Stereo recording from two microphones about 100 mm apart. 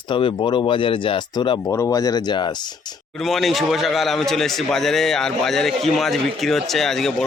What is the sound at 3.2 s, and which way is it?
A man's voice, centre (ahead or behind).